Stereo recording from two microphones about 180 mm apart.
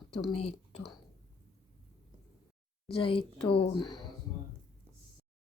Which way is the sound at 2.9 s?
30° left (ahead or behind).